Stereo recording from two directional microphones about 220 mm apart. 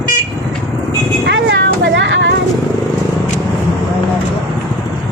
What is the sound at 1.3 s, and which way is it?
Vehicle, 55° right (ahead or behind).